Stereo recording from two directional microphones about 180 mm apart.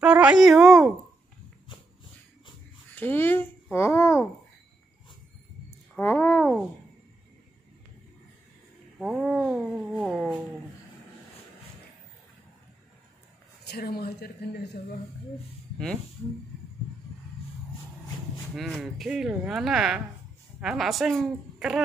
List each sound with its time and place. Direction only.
0.0 s speech: 5° right (ahead or behind)
2.9 s a child's voice: 10° left (ahead or behind)
5.9 s a child's voice: 10° left (ahead or behind)
8.9 s speech: 5° right (ahead or behind)
13.7 s speech: 60° left (ahead or behind)
18.6 s speech: centre (ahead or behind)